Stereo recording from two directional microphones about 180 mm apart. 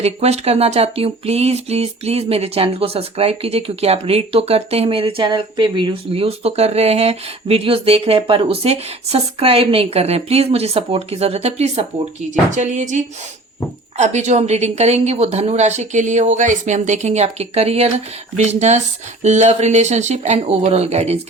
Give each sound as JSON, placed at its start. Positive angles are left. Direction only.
{"t": 0.0, "sound": "a woman's voice", "side_deg": -35}